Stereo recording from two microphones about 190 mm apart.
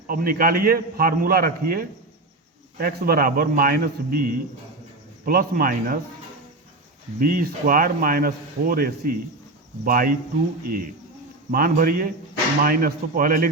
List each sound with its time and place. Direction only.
0.1 s a man's voice: 50° right (ahead or behind)
7.2 s a man's voice: 50° right (ahead or behind)
11.5 s a man's voice: 50° right (ahead or behind)